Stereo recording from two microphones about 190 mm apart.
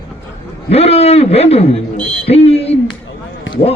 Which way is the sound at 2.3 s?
30° left (ahead or behind).